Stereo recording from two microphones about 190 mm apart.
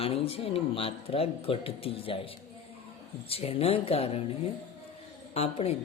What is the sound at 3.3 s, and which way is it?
Speech, 30° left (ahead or behind).